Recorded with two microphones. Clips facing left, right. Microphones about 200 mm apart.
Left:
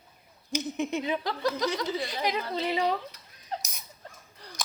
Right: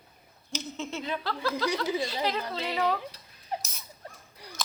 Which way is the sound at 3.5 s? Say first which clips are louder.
Right 1 dB; 15° right (ahead or behind).